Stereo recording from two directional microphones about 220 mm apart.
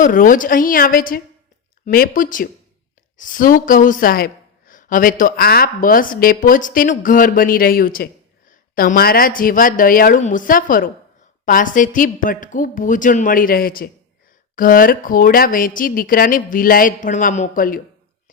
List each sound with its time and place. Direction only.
0.0 s a woman's voice: 40° left (ahead or behind)